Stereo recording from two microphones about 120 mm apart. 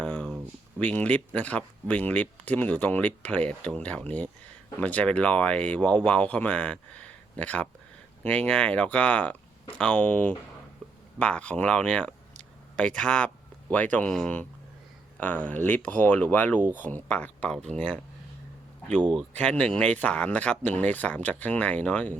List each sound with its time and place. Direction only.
0.0 s a sound: 10° left (ahead or behind)
0.8 s speech: 10° left (ahead or behind)
15.4 s speech: 15° left (ahead or behind)
19.3 s speech: 10° left (ahead or behind)